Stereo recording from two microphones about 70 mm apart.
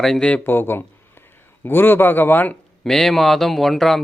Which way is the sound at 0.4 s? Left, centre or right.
Left.